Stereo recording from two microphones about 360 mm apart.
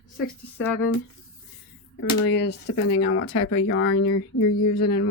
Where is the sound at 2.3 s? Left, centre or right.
Left.